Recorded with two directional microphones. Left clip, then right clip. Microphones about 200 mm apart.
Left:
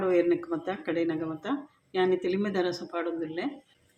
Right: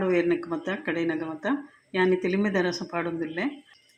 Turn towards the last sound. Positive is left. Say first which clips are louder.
# right 2 dB
turn(degrees=-40)  # may be behind; listen again after turning